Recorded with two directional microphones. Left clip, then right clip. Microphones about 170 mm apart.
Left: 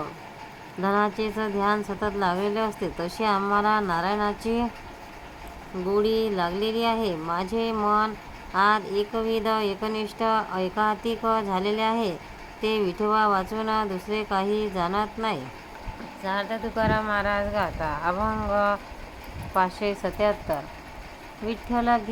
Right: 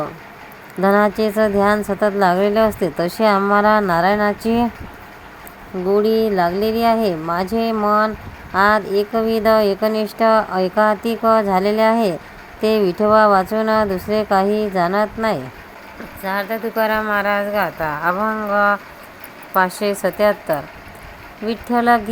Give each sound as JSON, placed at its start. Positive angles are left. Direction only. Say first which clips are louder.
{"t": 0.8, "sound": "speech", "louder": "right 9 dB", "side_deg": -50}
{"t": 5.9, "sound": "speech", "louder": "right 8 dB", "side_deg": -45}
{"t": 16.2, "sound": "a woman's voice", "louder": "right 7 dB", "side_deg": -35}